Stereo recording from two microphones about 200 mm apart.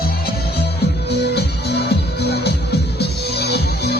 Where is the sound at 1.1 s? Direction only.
55° left (ahead or behind).